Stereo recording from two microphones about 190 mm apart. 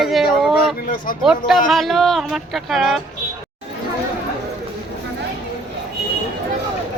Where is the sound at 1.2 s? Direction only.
Centre (ahead or behind).